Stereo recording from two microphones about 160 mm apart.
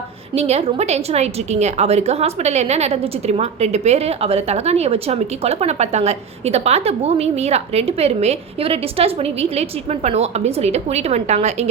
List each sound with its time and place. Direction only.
0.3 s a woman's voice: 40° right (ahead or behind)